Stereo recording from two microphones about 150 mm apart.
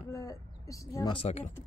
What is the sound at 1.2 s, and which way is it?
Speech, 50° left (ahead or behind).